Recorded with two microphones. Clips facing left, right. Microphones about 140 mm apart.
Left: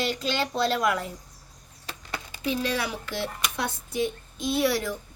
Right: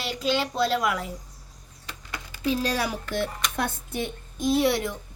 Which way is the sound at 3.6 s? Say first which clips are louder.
Left 2 dB; 55° right (ahead or behind).